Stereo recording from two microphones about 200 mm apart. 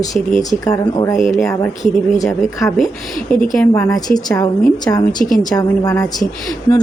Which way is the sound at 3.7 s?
15° left (ahead or behind).